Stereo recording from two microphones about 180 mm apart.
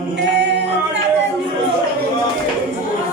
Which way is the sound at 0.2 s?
70° right (ahead or behind).